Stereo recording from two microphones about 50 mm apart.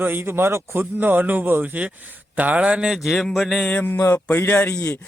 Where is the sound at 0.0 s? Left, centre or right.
Right.